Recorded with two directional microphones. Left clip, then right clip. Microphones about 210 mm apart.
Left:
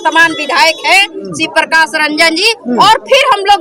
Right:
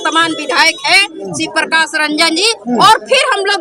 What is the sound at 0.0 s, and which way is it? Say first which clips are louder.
A woman's voice: left 4 dB; 5° left (ahead or behind).